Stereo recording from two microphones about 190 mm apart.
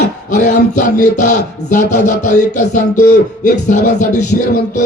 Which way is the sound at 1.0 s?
40° left (ahead or behind).